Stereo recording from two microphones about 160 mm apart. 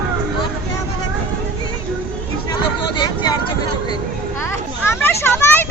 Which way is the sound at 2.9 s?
25° left (ahead or behind).